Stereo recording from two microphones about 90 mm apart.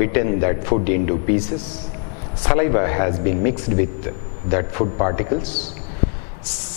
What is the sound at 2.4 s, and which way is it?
A man's voice, 10° left (ahead or behind).